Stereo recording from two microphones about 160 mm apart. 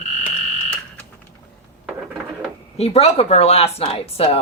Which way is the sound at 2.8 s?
40° left (ahead or behind).